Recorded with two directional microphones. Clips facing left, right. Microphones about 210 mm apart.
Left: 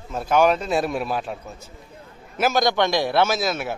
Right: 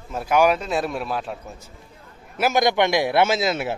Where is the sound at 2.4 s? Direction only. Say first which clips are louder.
Right 1 dB; 15° right (ahead or behind).